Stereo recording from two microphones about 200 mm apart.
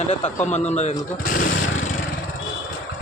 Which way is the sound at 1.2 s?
45° left (ahead or behind).